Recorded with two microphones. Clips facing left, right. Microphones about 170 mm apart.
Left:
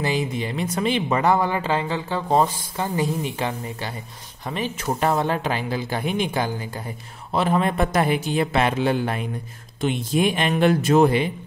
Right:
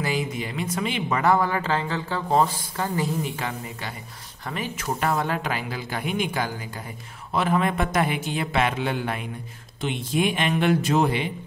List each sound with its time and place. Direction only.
0.0 s speech: 25° left (ahead or behind)
1.0 s speech: 20° left (ahead or behind); by 11.2 s 50° left (ahead or behind)